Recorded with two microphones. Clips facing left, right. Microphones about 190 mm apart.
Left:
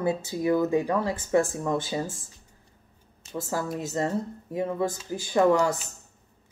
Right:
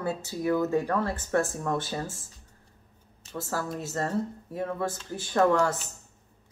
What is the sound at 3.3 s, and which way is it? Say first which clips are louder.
Speech: left 2 dB; 15° left (ahead or behind).